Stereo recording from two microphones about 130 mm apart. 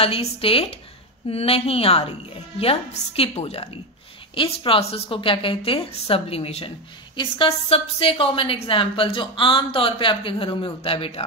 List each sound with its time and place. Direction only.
0.0 s a woman's voice: 50° left (ahead or behind)